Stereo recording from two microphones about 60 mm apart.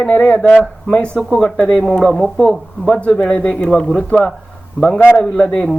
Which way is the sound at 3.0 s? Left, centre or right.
Left.